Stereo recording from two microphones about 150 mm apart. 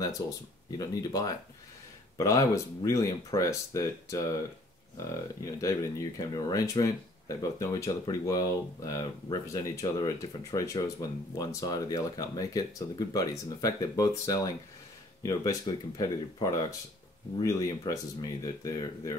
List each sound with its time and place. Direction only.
0.2 s speech: 25° left (ahead or behind)